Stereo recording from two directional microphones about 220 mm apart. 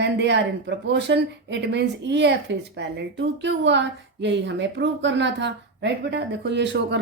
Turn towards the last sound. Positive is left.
turn(degrees=-55)  # may be behind; listen again after turning